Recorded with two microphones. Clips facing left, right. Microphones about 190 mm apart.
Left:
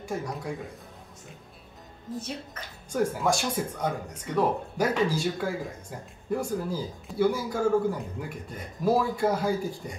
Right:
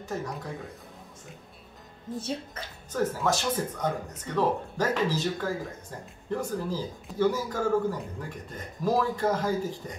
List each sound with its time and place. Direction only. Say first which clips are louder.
0.0 s speech: left 1 dB; 10° left (ahead or behind)
2.1 s speech: right 3 dB; 30° right (ahead or behind)
2.9 s speech: left 1 dB; 10° left (ahead or behind)